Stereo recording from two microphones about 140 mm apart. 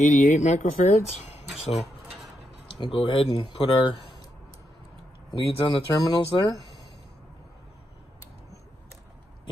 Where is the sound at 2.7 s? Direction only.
35° left (ahead or behind).